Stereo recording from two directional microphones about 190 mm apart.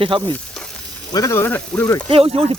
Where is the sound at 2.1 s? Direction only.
30° right (ahead or behind).